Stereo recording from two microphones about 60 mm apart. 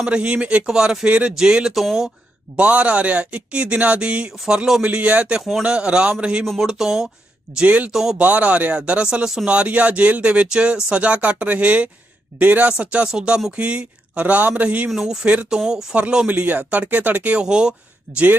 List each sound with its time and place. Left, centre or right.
0.0 s a man's voice: centre
2.6 s a man's voice: right
4.8 s speech: right
5.4 s speech: centre
5.6 s a man's voice: centre
6.6 s a man's voice: centre
7.6 s speech: right
7.9 s speech: centre
8.2 s speech: right; by 9.5 s centre
9.5 s a man's voice: right
14.8 s a man's voice: centre
15.2 s speech: right
15.4 s a man's voice: centre; by 17.3 s right
17.3 s a man's voice: centre